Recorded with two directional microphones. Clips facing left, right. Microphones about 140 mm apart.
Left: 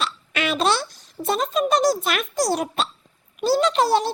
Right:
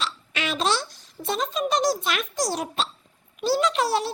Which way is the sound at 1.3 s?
55° left (ahead or behind).